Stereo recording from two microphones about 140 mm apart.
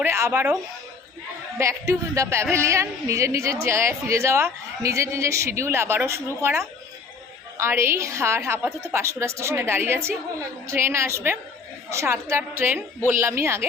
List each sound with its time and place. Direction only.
0.0 s a woman's voice: 15° right (ahead or behind)
1.5 s a woman's voice: 20° right (ahead or behind)